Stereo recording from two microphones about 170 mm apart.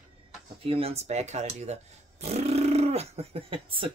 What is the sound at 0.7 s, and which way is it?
Speech, 35° right (ahead or behind).